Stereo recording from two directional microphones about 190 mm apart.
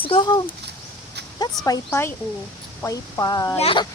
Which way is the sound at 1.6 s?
15° left (ahead or behind).